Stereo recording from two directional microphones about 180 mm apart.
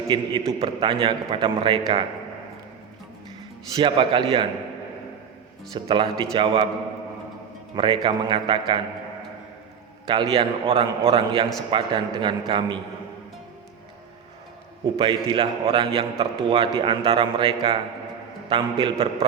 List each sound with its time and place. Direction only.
0.1 s a man's voice: 30° right (ahead or behind)
3.8 s a man's voice: 30° right (ahead or behind)
5.7 s a man's voice: 25° right (ahead or behind)
7.8 s a man's voice: 30° right (ahead or behind)
10.1 s a man's voice: 30° right (ahead or behind)
14.9 s a man's voice: 30° right (ahead or behind)